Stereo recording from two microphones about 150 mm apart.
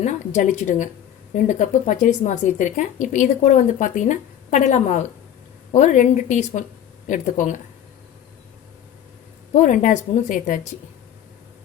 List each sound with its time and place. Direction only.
0.0 s a woman's voice: 50° left (ahead or behind)
9.6 s speech: 55° left (ahead or behind)